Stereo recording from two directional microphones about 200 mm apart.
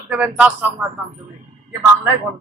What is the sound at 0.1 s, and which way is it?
Speech, 5° right (ahead or behind).